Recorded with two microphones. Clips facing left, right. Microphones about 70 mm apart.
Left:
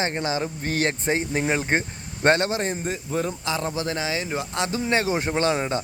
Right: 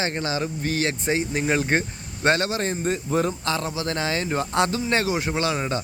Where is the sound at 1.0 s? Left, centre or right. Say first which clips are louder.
Even; left.